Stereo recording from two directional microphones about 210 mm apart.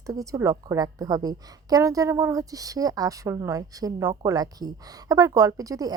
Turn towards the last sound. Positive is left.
turn(degrees=-15)  # may be behind; listen again after turning